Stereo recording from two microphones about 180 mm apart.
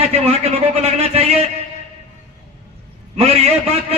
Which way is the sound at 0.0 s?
35° right (ahead or behind).